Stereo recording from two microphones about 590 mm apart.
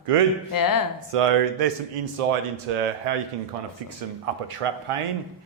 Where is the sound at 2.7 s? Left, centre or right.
Right.